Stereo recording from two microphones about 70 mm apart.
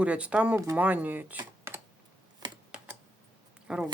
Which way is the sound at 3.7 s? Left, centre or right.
Centre.